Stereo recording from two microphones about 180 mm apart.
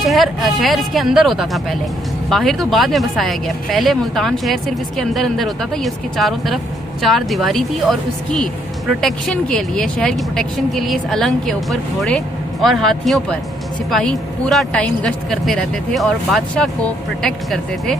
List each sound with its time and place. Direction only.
0.1 s speech: centre (ahead or behind)